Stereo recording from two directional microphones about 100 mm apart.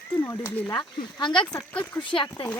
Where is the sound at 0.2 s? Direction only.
30° left (ahead or behind).